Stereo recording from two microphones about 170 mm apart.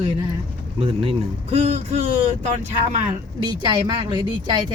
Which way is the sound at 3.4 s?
25° right (ahead or behind).